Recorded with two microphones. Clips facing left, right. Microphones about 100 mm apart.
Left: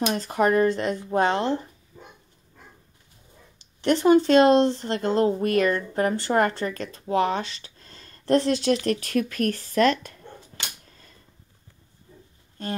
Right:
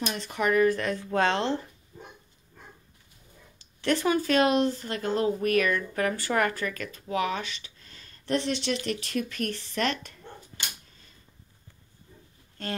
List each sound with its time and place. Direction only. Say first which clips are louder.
0.1 s speech: left 3 dB; 40° left (ahead or behind)
0.7 s speech: left 2 dB; 20° left (ahead or behind)
3.8 s speech: left 7 dB; 20° left (ahead or behind); by 10.1 s 45° left (ahead or behind)
10.9 s a sound: left 5 dB; 45° left (ahead or behind)